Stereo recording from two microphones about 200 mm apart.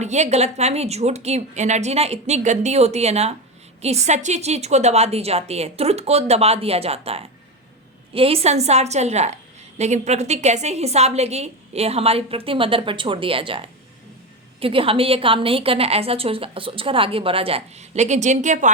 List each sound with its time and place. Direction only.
0.0 s a woman's voice: 35° right (ahead or behind)